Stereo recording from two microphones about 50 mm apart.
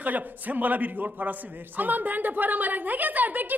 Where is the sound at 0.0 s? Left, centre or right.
Right.